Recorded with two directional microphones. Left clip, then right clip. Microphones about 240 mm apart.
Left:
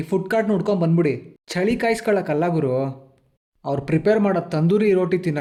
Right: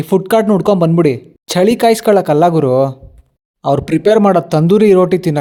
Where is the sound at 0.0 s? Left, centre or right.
Right.